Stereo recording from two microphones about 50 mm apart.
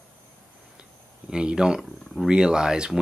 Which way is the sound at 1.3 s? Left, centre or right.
Centre.